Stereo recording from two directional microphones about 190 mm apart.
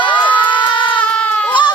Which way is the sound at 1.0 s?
5° left (ahead or behind).